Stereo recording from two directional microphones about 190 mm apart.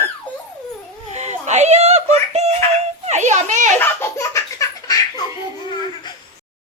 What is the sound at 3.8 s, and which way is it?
Laughter, 15° left (ahead or behind).